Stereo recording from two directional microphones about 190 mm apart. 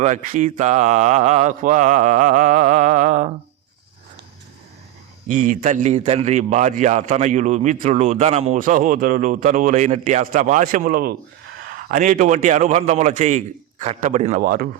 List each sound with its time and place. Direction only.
0.0 s a man's voice: 40° right (ahead or behind)
5.3 s a man's voice: 45° right (ahead or behind)
14.4 s speech: 50° right (ahead or behind)